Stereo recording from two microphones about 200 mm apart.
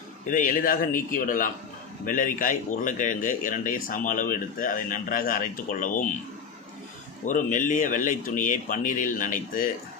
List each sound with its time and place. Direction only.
0.3 s a man's voice: 40° left (ahead or behind)
7.3 s speech: 40° left (ahead or behind)